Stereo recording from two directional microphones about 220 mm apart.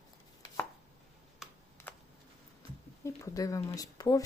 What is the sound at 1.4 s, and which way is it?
Computer keyboard, centre (ahead or behind).